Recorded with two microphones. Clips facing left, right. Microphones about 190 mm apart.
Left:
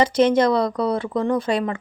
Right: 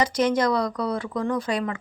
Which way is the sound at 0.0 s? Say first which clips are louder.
Left 5 dB; 25° left (ahead or behind).